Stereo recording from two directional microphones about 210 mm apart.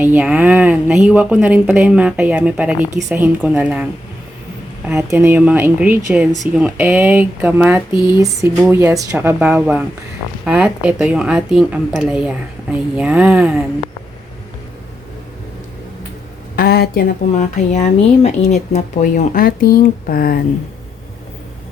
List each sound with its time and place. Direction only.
0.0 s speech: 5° right (ahead or behind)
5.0 s a woman's voice: 10° right (ahead or behind)
16.6 s speech: 45° left (ahead or behind)